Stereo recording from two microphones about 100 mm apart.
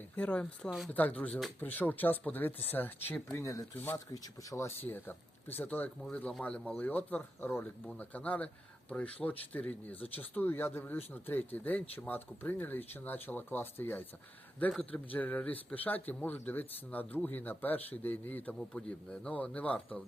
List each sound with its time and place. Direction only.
0.2 s a man's voice: 10° left (ahead or behind)
3.3 s speech: 30° left (ahead or behind)
3.9 s speech: 35° left (ahead or behind)
4.5 s a man's voice: 20° left (ahead or behind)